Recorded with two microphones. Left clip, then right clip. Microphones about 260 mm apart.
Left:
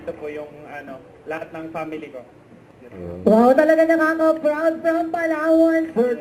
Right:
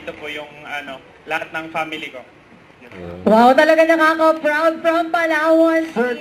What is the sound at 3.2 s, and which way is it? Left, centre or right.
A man's voice, centre.